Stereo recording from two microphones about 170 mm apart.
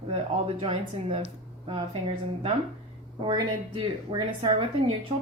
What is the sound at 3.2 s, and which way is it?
Speech, 25° right (ahead or behind).